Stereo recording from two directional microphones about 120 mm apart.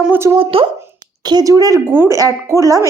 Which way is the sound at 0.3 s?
50° right (ahead or behind).